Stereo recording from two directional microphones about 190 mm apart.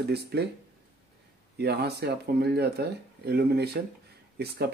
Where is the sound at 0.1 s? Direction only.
60° right (ahead or behind).